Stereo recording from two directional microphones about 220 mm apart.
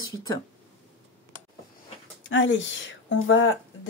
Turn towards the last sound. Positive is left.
turn(degrees=60)  # may be behind; listen again after turning